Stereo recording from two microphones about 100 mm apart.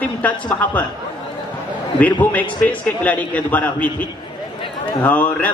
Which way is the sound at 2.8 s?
15° left (ahead or behind).